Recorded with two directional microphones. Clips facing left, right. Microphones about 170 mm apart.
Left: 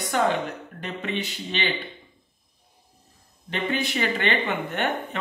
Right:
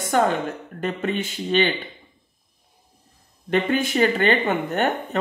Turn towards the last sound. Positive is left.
turn(degrees=-45)  # may be behind; listen again after turning